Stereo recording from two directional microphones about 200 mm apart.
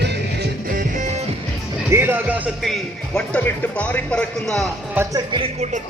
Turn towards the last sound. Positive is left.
turn(degrees=-30)  # may be behind; listen again after turning